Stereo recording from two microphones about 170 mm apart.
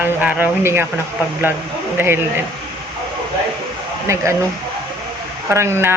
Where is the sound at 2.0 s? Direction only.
15° right (ahead or behind).